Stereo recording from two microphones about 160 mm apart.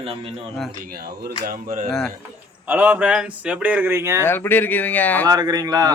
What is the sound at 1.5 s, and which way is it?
Speech, 60° right (ahead or behind).